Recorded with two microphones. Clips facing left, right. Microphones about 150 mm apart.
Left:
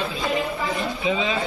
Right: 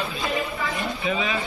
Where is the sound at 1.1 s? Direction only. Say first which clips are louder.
Left 2 dB; 20° left (ahead or behind).